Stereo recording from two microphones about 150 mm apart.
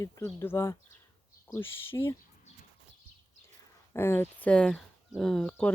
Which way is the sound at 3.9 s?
15° left (ahead or behind).